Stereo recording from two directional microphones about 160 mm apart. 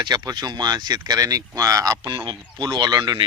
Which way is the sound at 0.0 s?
25° right (ahead or behind).